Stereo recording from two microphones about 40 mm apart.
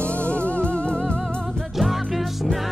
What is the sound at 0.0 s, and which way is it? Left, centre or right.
Music, left.